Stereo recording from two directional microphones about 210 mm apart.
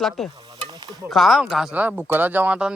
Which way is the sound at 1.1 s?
Centre (ahead or behind).